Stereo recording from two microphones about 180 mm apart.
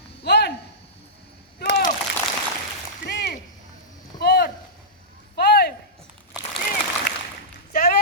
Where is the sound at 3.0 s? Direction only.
70° left (ahead or behind).